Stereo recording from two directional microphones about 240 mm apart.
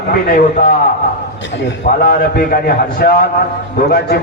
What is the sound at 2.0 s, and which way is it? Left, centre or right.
A man's voice, left.